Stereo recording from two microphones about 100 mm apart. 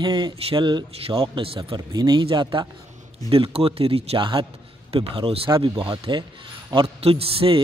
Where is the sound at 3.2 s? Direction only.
70° right (ahead or behind).